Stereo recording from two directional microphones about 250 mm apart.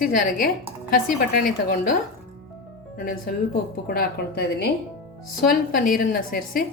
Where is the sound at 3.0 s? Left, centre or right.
Left.